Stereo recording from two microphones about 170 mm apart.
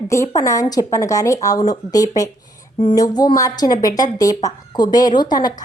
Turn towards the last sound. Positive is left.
turn(degrees=25)  # may be behind; listen again after turning